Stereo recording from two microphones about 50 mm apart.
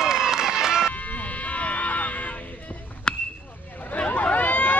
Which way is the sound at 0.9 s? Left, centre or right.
Left.